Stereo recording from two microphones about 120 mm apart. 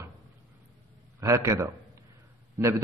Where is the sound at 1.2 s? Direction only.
25° right (ahead or behind).